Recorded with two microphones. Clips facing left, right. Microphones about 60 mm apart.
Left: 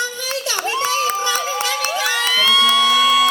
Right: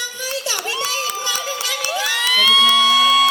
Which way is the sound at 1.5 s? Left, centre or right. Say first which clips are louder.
Left 3 dB; left.